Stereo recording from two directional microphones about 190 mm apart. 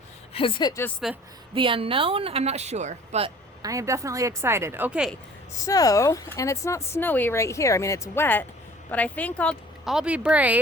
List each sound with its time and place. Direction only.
0.3 s speech: 25° left (ahead or behind)
1.0 s speech: centre (ahead or behind)
1.5 s a woman's voice: 25° right (ahead or behind)
3.6 s a woman's voice: 15° right (ahead or behind)
5.6 s speech: 20° left (ahead or behind); by 10.6 s 10° right (ahead or behind)